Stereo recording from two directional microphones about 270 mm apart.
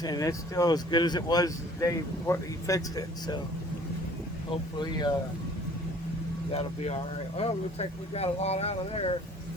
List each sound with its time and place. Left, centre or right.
0.0 s speech: centre
4.8 s speech: centre
6.5 s speech: left